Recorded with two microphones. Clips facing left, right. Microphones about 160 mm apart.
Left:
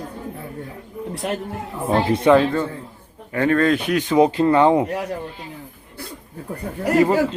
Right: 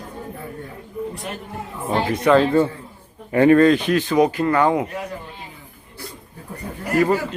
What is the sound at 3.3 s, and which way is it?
Speech, 15° right (ahead or behind).